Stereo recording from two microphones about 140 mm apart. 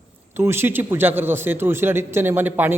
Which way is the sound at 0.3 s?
15° right (ahead or behind).